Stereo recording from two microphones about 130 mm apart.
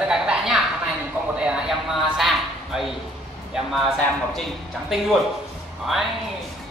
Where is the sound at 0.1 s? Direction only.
5° right (ahead or behind).